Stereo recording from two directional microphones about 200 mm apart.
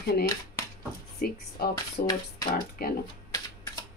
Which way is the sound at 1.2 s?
50° left (ahead or behind).